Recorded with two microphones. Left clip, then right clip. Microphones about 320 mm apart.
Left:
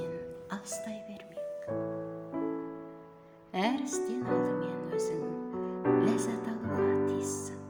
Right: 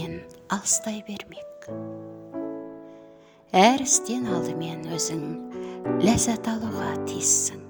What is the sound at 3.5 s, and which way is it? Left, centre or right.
A woman's voice, right.